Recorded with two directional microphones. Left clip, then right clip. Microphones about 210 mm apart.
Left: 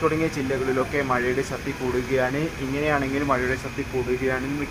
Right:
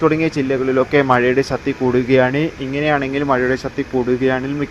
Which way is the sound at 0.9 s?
30° right (ahead or behind).